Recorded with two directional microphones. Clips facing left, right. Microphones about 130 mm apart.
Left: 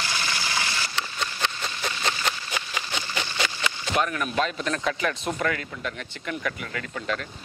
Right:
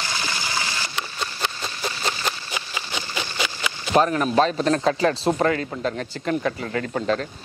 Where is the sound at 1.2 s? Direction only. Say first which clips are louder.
Right 1 dB; 30° right (ahead or behind).